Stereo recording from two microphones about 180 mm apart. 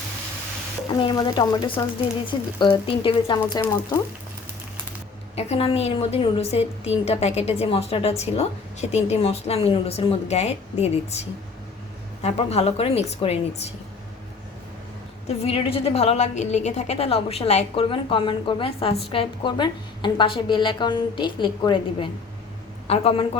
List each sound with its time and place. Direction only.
0.9 s speech: 25° left (ahead or behind)
3.6 s speech: 15° left (ahead or behind)
5.4 s a woman's voice: 35° left (ahead or behind)
15.3 s a woman's voice: 35° left (ahead or behind)